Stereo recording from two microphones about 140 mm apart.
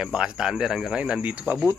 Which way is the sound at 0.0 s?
5° right (ahead or behind).